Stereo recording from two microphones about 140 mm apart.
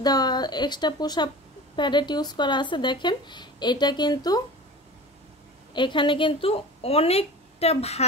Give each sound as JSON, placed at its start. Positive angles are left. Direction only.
{"t": 0.0, "sound": "speech", "side_deg": 30}
{"t": 5.7, "sound": "a woman's voice", "side_deg": 35}